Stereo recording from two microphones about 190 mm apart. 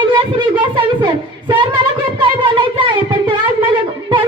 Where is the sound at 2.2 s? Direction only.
25° right (ahead or behind).